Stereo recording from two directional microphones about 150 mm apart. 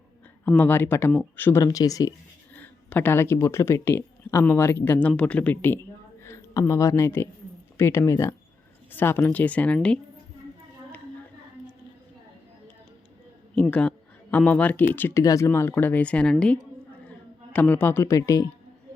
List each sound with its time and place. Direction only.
0.4 s speech: 10° left (ahead or behind)
1.6 s speech: 25° left (ahead or behind)
2.6 s speech: 10° left (ahead or behind)
13.6 s speech: 10° left (ahead or behind)